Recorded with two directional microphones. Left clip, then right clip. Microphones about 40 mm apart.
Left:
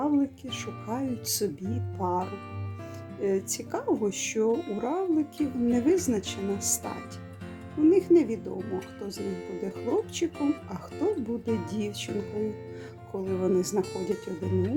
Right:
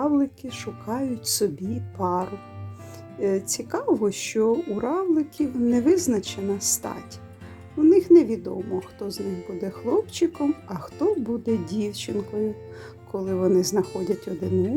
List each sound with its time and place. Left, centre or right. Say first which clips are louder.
0.0 s speech: right 4 dB; right
4.5 s speech: right 4 dB; right
7.9 s speech: right 6 dB; right
13.8 s speech: right 4 dB; right